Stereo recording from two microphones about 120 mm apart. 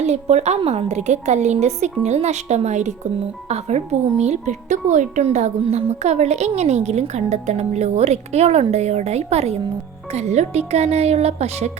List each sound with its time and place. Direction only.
0.0 s a woman's voice: 65° right (ahead or behind); by 3.1 s 85° right
3.5 s a woman's voice: 65° right (ahead or behind)
5.6 s a woman's voice: 65° right (ahead or behind)